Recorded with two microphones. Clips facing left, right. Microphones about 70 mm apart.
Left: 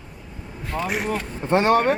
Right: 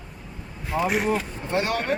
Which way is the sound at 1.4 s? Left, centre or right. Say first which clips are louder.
Left 8 dB; left.